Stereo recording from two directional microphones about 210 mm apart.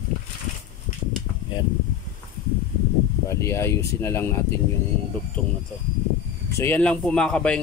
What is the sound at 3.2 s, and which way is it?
Speech, 15° left (ahead or behind).